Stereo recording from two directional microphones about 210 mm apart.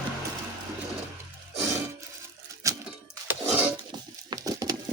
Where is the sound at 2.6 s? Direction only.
15° right (ahead or behind).